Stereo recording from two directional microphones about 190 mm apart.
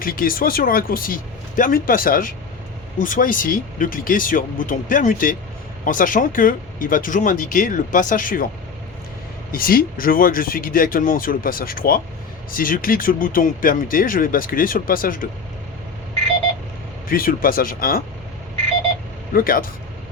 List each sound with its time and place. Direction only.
0.0 s speech: 50° left (ahead or behind)
9.5 s speech: 50° left (ahead or behind)
17.1 s speech: 50° left (ahead or behind)
19.3 s speech: 50° left (ahead or behind)